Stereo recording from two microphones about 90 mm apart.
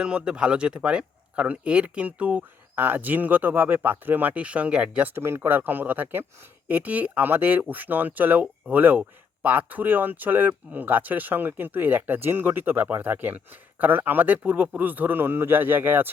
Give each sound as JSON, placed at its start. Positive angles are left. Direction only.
{"t": 0.0, "sound": "speech", "side_deg": -10}
{"t": 5.1, "sound": "speech", "side_deg": -30}